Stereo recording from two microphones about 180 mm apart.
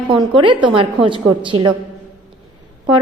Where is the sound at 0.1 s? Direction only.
25° right (ahead or behind).